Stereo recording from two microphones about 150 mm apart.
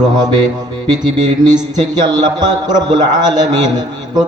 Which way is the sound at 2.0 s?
30° right (ahead or behind).